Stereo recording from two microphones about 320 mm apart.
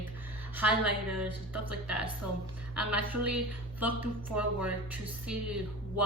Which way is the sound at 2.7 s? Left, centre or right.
Centre.